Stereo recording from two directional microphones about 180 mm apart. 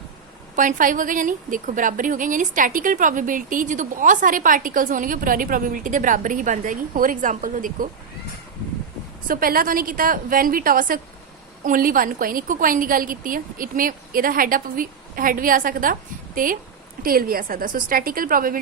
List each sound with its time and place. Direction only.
0.5 s a woman's voice: 45° right (ahead or behind)
9.2 s a woman's voice: 55° right (ahead or behind)